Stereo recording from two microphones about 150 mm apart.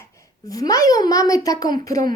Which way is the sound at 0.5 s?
25° left (ahead or behind).